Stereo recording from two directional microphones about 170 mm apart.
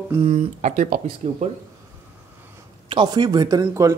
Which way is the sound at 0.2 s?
40° right (ahead or behind).